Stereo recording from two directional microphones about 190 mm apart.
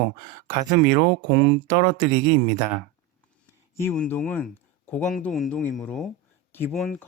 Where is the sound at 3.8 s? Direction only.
10° left (ahead or behind).